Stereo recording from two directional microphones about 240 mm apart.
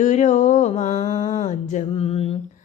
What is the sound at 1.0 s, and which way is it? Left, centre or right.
Mantra, centre.